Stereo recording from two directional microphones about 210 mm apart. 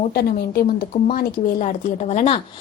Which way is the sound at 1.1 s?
35° left (ahead or behind).